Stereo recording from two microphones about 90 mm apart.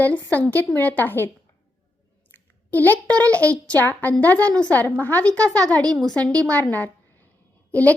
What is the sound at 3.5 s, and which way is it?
A woman's voice, 15° left (ahead or behind).